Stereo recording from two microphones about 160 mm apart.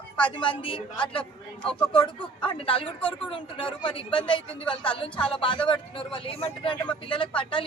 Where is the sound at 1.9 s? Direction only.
30° left (ahead or behind).